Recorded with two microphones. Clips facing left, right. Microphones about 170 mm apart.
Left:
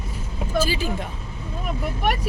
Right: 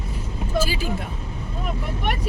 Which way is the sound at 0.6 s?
10° right (ahead or behind).